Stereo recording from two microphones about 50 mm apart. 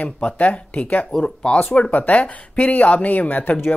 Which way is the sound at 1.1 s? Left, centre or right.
Centre.